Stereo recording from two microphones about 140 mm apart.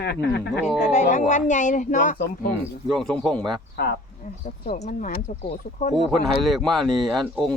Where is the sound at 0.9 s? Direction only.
60° left (ahead or behind); by 2.5 s 75° left (ahead or behind).